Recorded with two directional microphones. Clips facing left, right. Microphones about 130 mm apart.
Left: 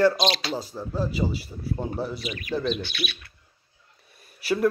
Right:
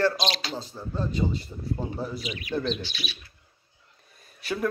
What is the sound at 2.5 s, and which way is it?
Speech, 5° left (ahead or behind).